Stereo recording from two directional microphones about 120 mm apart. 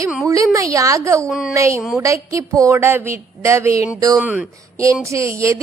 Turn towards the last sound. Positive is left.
turn(degrees=-25)  # may be behind; listen again after turning